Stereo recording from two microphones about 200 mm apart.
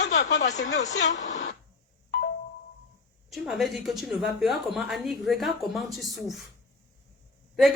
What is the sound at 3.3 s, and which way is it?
A woman's voice, centre (ahead or behind).